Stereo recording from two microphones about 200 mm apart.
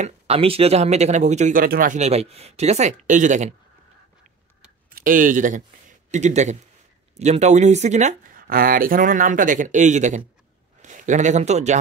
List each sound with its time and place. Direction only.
0.0 s speech: 30° right (ahead or behind)
4.9 s a man's voice: 45° right (ahead or behind)